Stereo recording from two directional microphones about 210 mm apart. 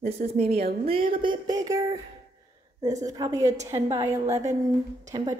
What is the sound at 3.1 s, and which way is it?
A woman's voice, 15° right (ahead or behind).